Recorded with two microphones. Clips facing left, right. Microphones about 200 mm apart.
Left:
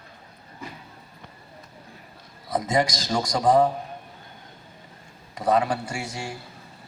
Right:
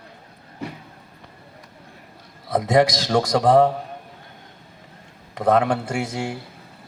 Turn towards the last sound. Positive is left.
turn(degrees=-60)  # may be behind; listen again after turning